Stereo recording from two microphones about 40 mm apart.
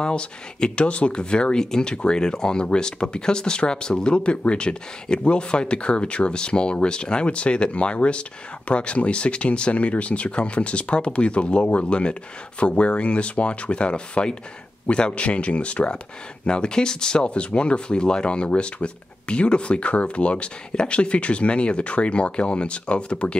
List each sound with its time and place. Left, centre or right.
0.0 s speech: left
16.4 s speech: left